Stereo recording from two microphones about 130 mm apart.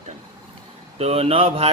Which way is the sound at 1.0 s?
50° right (ahead or behind).